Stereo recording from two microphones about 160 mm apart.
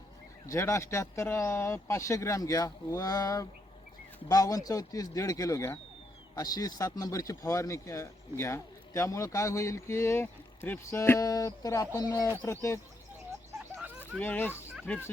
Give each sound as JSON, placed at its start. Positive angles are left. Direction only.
{"t": 0.4, "sound": "speech", "side_deg": 20}
{"t": 14.2, "sound": "speech", "side_deg": 10}
{"t": 14.5, "sound": "fowl", "side_deg": -5}
{"t": 14.8, "sound": "speech", "side_deg": 10}